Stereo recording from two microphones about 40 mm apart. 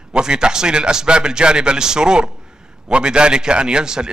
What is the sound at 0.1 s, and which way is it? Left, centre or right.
A man's voice, right.